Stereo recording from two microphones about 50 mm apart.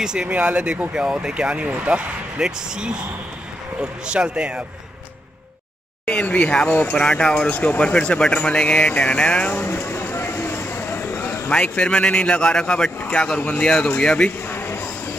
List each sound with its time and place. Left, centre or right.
0.0 s speech: centre
0.3 s speech: right
2.4 s speech: centre
6.2 s speech: left
7.0 s speech: centre
7.4 s speech: left
9.8 s a sound: left
11.5 s speech: left
14.5 s a sound: left